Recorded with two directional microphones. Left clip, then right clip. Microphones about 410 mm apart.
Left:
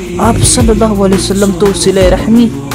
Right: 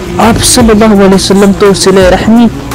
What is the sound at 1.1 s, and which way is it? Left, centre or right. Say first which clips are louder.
Speech: right 5 dB; left.